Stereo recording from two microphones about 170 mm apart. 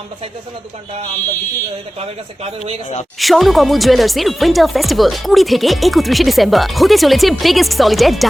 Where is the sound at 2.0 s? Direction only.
35° right (ahead or behind).